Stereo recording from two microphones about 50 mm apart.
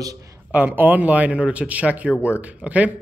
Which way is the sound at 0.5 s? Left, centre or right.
Right.